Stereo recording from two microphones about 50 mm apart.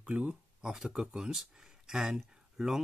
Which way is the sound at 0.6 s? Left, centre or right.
Centre.